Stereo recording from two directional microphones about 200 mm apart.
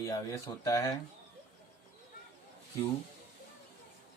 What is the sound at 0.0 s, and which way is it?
Speech, 15° left (ahead or behind).